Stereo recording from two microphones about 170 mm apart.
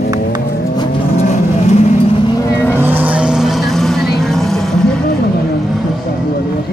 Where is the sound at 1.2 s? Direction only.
40° left (ahead or behind).